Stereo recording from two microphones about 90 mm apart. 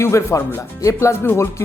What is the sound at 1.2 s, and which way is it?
Speech, 20° left (ahead or behind).